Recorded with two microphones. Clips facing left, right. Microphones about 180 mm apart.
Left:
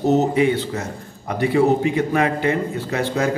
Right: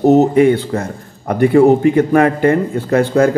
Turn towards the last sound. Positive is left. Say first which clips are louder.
# right 9 dB
turn(degrees=-50)  # may be behind; listen again after turning